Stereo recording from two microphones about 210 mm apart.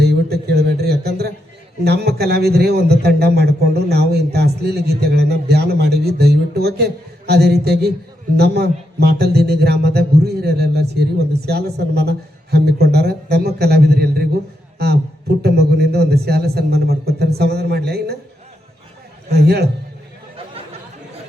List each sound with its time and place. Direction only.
0.0 s a sound: 50° right (ahead or behind)
1.8 s a man's voice: 50° right (ahead or behind)
15.4 s a man's voice: 50° right (ahead or behind)
19.3 s a man's voice: 50° right (ahead or behind)